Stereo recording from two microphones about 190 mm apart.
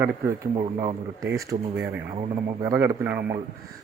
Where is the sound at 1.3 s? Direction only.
15° right (ahead or behind).